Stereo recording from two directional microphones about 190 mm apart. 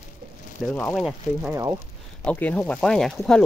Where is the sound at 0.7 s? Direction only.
Centre (ahead or behind).